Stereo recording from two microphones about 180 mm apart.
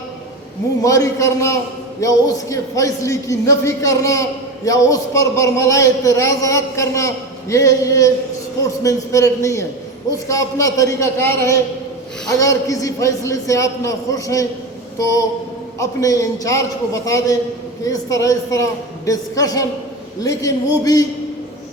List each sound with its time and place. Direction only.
0.8 s a man's voice: 20° left (ahead or behind)
15.8 s a woman's voice: 20° left (ahead or behind)